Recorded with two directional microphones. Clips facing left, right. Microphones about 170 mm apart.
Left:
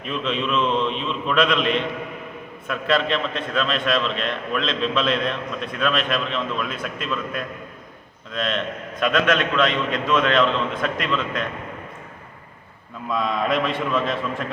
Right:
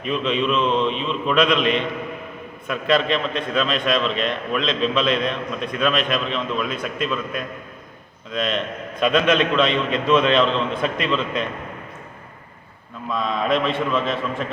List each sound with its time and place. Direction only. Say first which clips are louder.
0.0 s a man's voice: right 4 dB; centre (ahead or behind)
9.0 s a man's voice: right 2 dB; 25° right (ahead or behind)
13.1 s a man's voice: right 1 dB; centre (ahead or behind)